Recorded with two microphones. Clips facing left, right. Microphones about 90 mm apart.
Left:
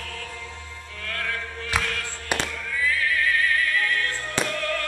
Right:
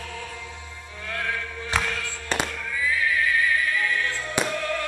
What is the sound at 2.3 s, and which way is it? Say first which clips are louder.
Fireworks: even; 10° left (ahead or behind).